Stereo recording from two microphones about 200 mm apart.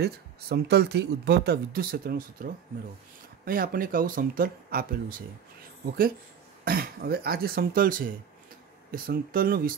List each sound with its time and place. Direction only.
0.0 s speech: 55° right (ahead or behind)
6.6 s speech: 50° right (ahead or behind)